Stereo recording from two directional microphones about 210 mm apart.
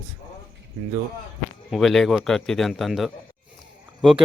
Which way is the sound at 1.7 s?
Centre (ahead or behind).